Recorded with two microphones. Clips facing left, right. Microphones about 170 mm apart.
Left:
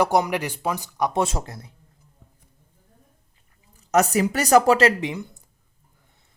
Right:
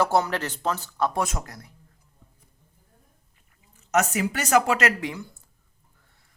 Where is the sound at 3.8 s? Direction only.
35° left (ahead or behind); by 5.4 s 20° left (ahead or behind).